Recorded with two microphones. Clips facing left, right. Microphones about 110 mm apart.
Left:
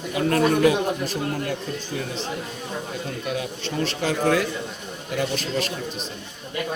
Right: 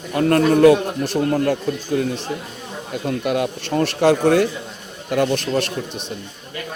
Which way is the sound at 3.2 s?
60° right (ahead or behind).